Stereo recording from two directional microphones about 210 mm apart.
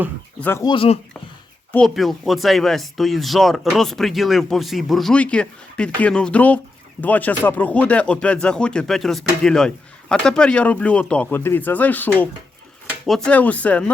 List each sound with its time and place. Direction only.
0.3 s speech: 10° left (ahead or behind)
0.7 s speech: 25° left (ahead or behind)
1.7 s speech: centre (ahead or behind)